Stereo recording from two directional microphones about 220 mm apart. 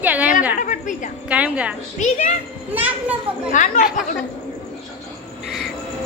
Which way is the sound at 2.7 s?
5° right (ahead or behind).